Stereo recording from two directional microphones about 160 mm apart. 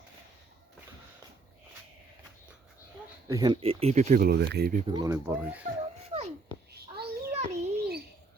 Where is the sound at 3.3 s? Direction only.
25° right (ahead or behind); by 4.2 s 45° right (ahead or behind).